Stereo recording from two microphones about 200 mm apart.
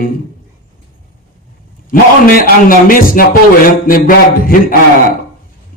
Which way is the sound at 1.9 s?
45° left (ahead or behind).